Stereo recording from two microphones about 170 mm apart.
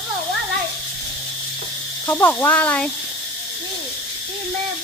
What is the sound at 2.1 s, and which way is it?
Speech, 15° left (ahead or behind).